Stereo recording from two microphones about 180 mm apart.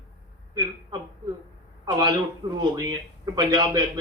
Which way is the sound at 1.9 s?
25° right (ahead or behind).